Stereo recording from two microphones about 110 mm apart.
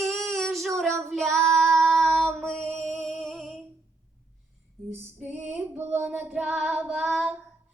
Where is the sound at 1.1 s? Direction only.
Centre (ahead or behind).